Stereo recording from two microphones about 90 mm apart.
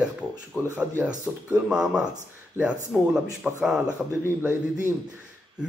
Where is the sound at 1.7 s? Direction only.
10° right (ahead or behind).